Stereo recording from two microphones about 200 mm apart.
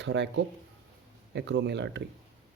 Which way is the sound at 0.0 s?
60° right (ahead or behind).